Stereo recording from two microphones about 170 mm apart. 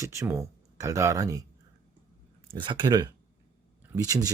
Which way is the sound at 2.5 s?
30° right (ahead or behind).